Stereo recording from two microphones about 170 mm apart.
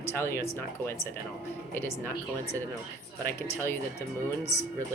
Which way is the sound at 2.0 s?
10° left (ahead or behind).